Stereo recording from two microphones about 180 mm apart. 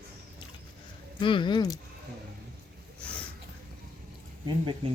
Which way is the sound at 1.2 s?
25° left (ahead or behind).